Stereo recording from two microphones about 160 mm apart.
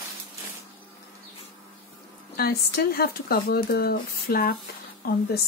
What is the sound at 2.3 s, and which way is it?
Speech, 70° left (ahead or behind).